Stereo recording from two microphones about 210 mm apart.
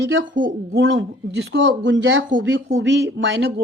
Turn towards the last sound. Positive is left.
turn(degrees=-55)  # may be behind; listen again after turning